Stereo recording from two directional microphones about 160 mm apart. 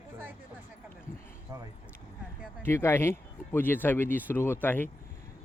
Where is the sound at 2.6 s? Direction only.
15° left (ahead or behind).